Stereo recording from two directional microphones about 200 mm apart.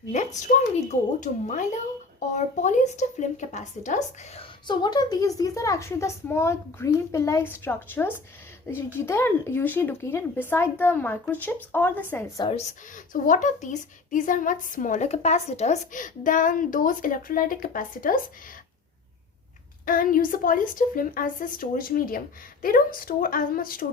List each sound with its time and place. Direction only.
0.1 s a woman's voice: 35° left (ahead or behind)
4.6 s a woman's voice: 20° left (ahead or behind)
12.4 s a woman's voice: 30° left (ahead or behind)
19.8 s a woman's voice: 45° left (ahead or behind)